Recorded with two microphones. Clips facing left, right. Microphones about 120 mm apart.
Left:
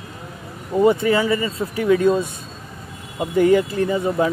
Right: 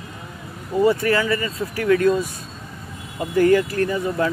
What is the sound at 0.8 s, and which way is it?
Speech, 20° left (ahead or behind).